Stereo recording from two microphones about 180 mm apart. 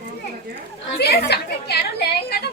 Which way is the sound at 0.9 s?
65° left (ahead or behind).